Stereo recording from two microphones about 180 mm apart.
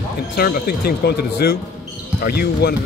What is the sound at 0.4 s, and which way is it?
Speech, 60° left (ahead or behind).